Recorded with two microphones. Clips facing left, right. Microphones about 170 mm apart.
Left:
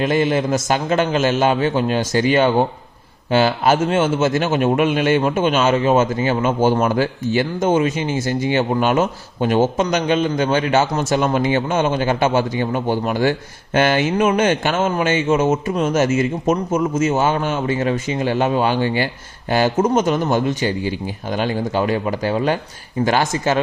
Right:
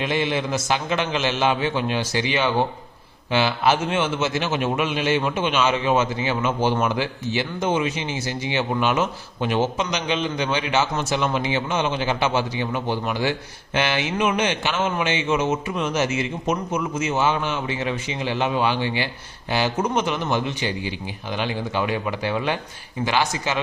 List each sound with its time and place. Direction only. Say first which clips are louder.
0.0 s a man's voice: left 6 dB; 45° left (ahead or behind)